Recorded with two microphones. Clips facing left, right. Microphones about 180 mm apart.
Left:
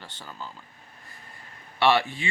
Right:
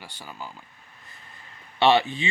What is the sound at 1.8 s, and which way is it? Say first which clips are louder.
Speech: right 3 dB; 20° right (ahead or behind).